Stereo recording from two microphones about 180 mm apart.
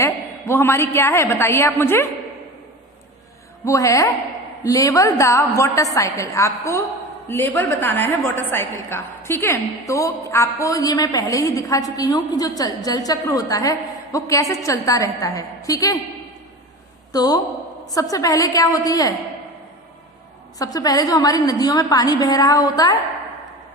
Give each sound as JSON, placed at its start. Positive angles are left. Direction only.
{"t": 0.0, "sound": "a woman's voice", "side_deg": 15}
{"t": 3.7, "sound": "a woman's voice", "side_deg": 15}
{"t": 17.1, "sound": "a woman's voice", "side_deg": 20}
{"t": 20.6, "sound": "a woman's voice", "side_deg": 20}